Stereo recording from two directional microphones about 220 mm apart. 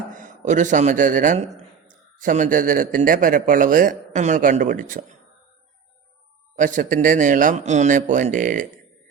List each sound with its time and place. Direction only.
0.1 s a man's voice: 35° right (ahead or behind)
6.6 s speech: 35° right (ahead or behind)